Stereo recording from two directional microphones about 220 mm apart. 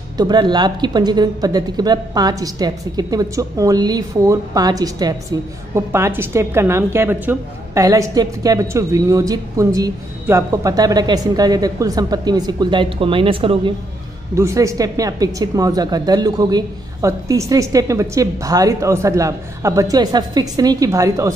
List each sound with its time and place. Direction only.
0.2 s a woman's voice: 20° right (ahead or behind)
14.3 s a woman's voice: 15° right (ahead or behind)